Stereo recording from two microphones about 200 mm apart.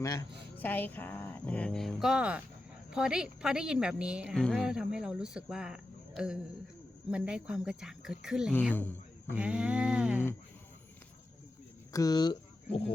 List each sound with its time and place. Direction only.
0.5 s a woman's voice: 10° left (ahead or behind)
8.7 s a man's voice: 10° left (ahead or behind)
9.3 s a woman's voice: 5° right (ahead or behind)
11.9 s speech: 20° left (ahead or behind)